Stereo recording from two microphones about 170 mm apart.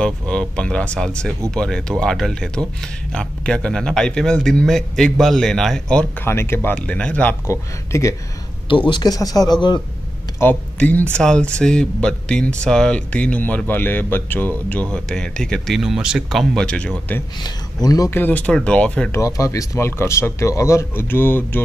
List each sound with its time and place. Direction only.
0.0 s a man's voice: 5° left (ahead or behind)
8.6 s a man's voice: 30° left (ahead or behind)
10.4 s a man's voice: 10° left (ahead or behind)
17.8 s speech: 20° left (ahead or behind)
19.1 s speech: 20° left (ahead or behind)